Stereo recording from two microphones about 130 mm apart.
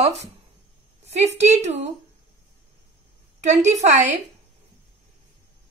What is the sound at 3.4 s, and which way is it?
Speech, 60° right (ahead or behind).